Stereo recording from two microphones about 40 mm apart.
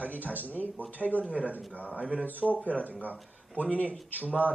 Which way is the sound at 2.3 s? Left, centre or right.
Left.